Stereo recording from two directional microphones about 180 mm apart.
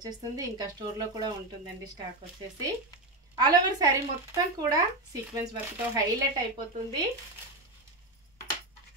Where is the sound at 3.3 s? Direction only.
20° right (ahead or behind).